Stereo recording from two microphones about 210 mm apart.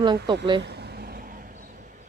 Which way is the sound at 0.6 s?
50° right (ahead or behind).